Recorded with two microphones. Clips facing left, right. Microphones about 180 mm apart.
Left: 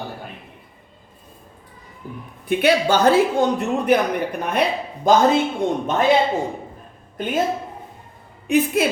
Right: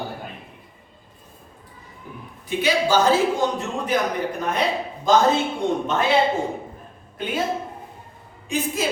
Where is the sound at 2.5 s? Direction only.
60° left (ahead or behind).